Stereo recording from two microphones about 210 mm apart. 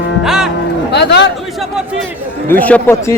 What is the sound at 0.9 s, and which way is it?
Speech, 55° left (ahead or behind).